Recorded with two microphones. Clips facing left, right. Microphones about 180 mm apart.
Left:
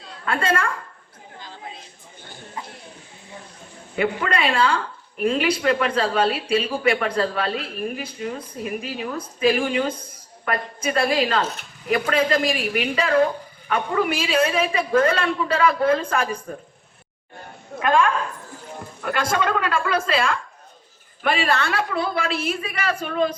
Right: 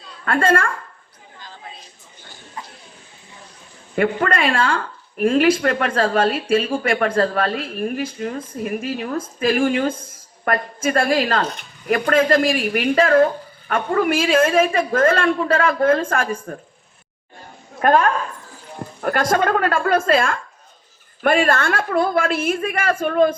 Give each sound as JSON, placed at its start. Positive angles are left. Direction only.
{"t": 0.3, "sound": "a woman's voice", "side_deg": -50}
{"t": 3.9, "sound": "a woman's voice", "side_deg": -50}
{"t": 17.7, "sound": "a woman's voice", "side_deg": -45}